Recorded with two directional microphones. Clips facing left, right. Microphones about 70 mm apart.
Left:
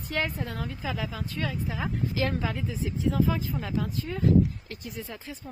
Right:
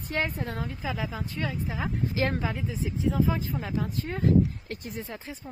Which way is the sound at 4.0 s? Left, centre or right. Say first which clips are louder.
Even; right.